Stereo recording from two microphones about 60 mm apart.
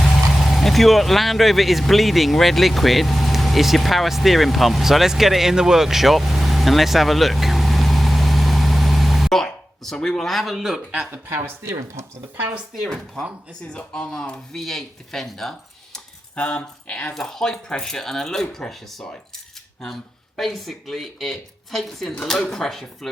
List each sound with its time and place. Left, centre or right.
0.0 s speech: centre
11.3 s speech: right
13.7 s speech: centre
16.3 s speech: left
17.2 s speech: centre